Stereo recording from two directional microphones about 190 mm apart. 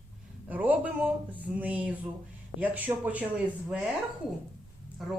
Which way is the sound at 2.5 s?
10° right (ahead or behind).